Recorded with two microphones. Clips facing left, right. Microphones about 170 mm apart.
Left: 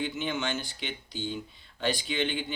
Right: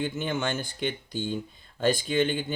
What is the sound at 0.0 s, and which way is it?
Speech, 50° right (ahead or behind).